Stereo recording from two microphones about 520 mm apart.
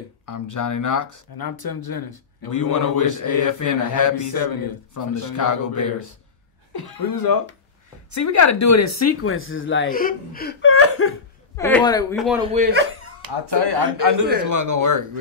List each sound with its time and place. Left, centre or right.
0.2 s speech: left
11.5 s speech: centre
12.5 s speech: centre
13.2 s speech: right